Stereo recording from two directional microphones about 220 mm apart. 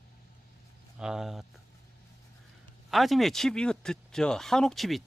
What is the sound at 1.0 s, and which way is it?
Speech, centre (ahead or behind).